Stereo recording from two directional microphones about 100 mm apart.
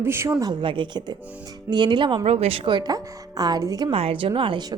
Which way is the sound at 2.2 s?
90° right.